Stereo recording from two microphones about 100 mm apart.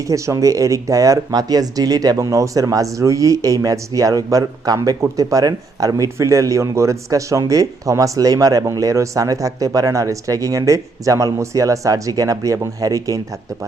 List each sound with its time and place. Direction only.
0.0 s speech: 30° right (ahead or behind)